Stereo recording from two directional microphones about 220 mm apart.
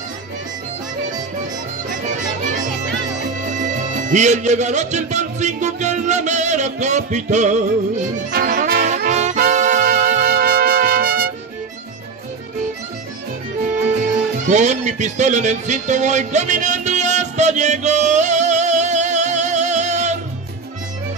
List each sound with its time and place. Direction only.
2.4 s speech: 35° right (ahead or behind)
8.3 s music: 40° right (ahead or behind)
14.5 s a sound: 30° right (ahead or behind)